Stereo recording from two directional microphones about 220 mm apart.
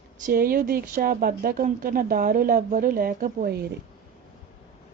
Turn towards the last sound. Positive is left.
turn(degrees=-45)  # may be behind; listen again after turning